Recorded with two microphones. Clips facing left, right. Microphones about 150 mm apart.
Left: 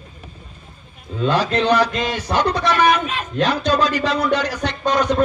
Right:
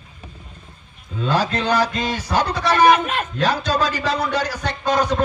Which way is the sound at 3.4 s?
35° right (ahead or behind).